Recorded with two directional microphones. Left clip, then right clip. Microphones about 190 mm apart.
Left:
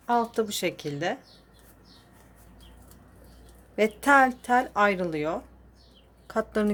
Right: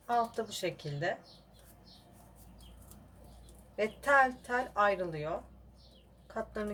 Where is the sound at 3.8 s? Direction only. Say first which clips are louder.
Left 7 dB; 60° left (ahead or behind).